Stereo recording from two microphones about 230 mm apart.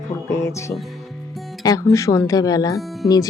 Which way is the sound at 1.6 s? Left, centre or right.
Centre.